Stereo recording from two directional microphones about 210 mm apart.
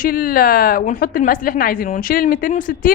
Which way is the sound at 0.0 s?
45° left (ahead or behind).